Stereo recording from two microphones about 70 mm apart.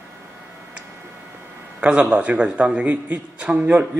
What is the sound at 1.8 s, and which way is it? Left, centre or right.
A man's voice, centre.